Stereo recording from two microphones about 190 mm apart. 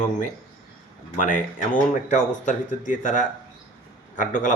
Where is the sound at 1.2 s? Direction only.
45° left (ahead or behind).